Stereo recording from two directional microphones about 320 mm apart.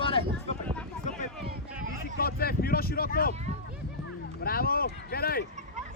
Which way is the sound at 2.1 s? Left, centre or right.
Left.